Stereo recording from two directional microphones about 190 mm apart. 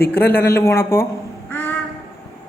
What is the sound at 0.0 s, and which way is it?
Speech, 10° left (ahead or behind).